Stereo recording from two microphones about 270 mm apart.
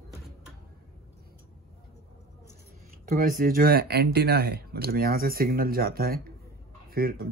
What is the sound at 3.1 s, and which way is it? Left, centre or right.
A man's voice, right.